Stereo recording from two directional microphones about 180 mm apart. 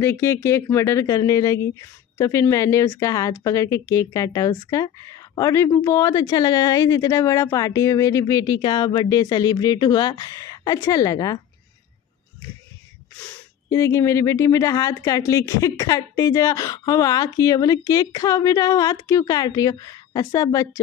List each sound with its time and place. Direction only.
0.0 s speech: 15° left (ahead or behind)
13.2 s speech: 15° left (ahead or behind)